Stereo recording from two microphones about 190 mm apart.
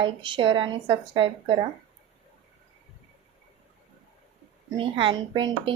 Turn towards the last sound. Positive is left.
turn(degrees=-25)  # may be behind; listen again after turning